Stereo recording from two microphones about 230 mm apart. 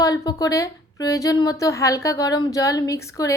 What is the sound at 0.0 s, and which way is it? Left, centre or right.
A woman's voice, centre.